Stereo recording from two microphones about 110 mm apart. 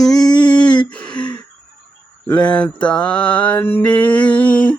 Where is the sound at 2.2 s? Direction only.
10° left (ahead or behind).